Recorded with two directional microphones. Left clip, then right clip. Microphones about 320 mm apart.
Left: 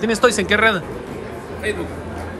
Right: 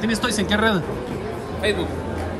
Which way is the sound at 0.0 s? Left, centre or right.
Centre.